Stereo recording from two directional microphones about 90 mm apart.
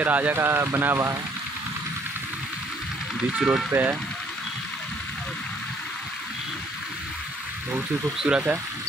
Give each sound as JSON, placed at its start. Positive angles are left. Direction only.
{"t": 0.0, "sound": "speech", "side_deg": -20}
{"t": 3.3, "sound": "speech", "side_deg": -10}
{"t": 8.2, "sound": "speech", "side_deg": -10}